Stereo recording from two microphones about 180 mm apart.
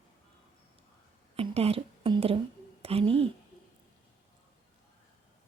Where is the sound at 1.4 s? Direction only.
35° right (ahead or behind).